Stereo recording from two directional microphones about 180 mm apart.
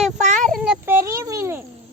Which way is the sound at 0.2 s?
40° right (ahead or behind).